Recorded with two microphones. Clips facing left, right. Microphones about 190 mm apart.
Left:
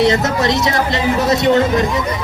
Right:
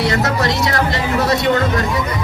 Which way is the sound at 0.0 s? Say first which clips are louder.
Left 3 dB; 20° left (ahead or behind).